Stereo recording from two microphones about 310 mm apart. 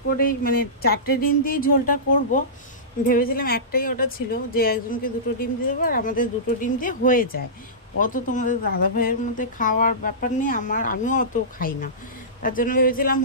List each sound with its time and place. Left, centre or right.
0.2 s speech: left